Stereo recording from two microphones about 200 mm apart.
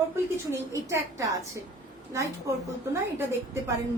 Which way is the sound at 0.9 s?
15° right (ahead or behind).